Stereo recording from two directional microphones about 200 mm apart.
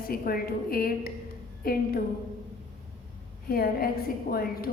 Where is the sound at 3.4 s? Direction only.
50° left (ahead or behind).